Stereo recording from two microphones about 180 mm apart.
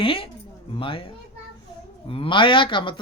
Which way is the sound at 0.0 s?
30° left (ahead or behind).